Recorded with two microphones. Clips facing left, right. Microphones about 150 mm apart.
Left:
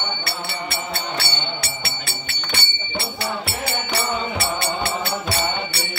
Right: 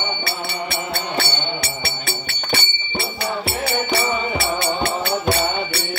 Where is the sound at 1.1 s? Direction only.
50° right (ahead or behind).